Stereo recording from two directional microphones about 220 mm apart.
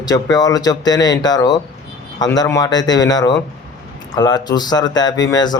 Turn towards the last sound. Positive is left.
turn(degrees=20)  # may be behind; listen again after turning